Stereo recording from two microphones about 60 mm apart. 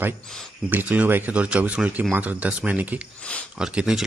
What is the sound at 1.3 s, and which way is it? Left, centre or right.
Speech, right.